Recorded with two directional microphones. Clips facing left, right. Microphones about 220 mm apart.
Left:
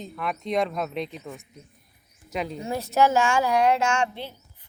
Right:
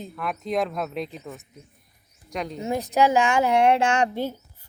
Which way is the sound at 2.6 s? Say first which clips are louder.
Right 1 dB; 15° right (ahead or behind).